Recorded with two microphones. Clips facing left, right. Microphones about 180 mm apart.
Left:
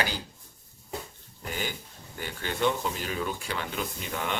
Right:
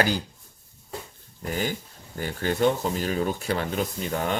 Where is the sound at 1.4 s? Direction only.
40° right (ahead or behind).